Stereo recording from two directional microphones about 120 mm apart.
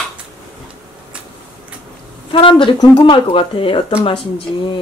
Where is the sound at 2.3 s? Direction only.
45° left (ahead or behind).